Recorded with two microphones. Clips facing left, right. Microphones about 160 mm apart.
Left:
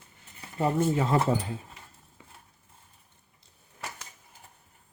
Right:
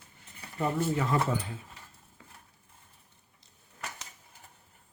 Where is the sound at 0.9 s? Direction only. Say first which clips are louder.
Left 3 dB; 25° left (ahead or behind).